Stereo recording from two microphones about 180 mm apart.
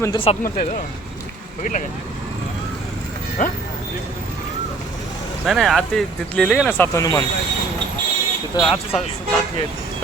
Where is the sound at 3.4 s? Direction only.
45° left (ahead or behind).